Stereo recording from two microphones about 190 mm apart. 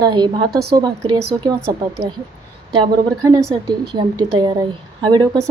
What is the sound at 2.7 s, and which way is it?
A woman's voice, 20° right (ahead or behind).